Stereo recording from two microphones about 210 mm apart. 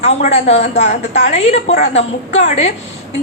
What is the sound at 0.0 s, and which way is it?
A woman's voice, 30° left (ahead or behind).